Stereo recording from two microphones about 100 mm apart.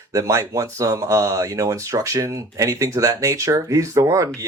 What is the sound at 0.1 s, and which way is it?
Speech, 35° right (ahead or behind).